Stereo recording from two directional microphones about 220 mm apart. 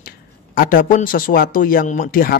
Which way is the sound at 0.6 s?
40° left (ahead or behind).